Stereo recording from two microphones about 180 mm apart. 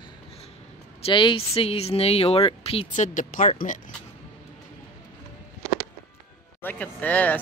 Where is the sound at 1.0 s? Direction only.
25° left (ahead or behind); by 3.5 s 45° left (ahead or behind).